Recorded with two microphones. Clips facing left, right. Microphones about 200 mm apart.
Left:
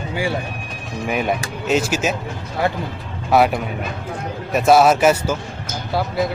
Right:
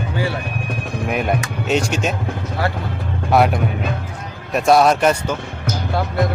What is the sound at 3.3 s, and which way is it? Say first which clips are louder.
Speech: even; centre (ahead or behind).